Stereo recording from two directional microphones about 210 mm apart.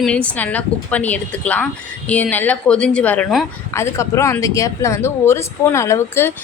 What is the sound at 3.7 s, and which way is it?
Speech, 15° left (ahead or behind).